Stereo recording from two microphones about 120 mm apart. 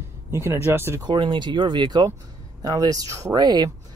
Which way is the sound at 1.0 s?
40° right (ahead or behind).